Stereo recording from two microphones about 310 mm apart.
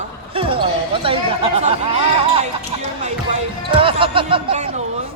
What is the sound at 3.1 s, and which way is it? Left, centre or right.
Speech, centre.